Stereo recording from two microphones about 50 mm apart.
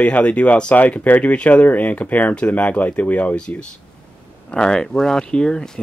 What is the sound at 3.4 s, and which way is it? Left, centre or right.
Speech, left.